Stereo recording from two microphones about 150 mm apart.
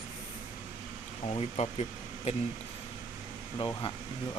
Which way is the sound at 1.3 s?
45° left (ahead or behind).